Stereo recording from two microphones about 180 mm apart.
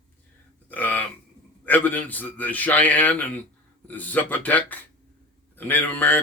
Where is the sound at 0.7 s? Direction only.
10° left (ahead or behind).